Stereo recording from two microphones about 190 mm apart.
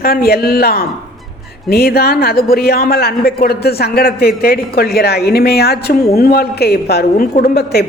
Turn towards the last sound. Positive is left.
turn(degrees=55)  # may be behind; listen again after turning